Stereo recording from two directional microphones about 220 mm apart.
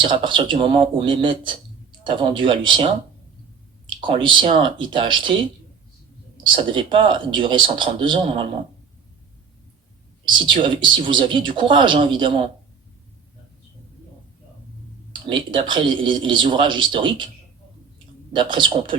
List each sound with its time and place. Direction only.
0.0 s speech: 20° right (ahead or behind)
6.3 s speech: 20° right (ahead or behind)
10.2 s speech: 20° right (ahead or behind)
15.1 s speech: 20° right (ahead or behind)
18.3 s speech: 20° right (ahead or behind)